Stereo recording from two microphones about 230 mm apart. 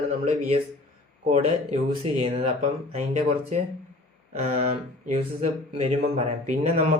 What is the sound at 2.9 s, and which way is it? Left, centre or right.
Speech, right.